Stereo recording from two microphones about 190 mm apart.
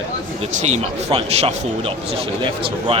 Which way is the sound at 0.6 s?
35° right (ahead or behind).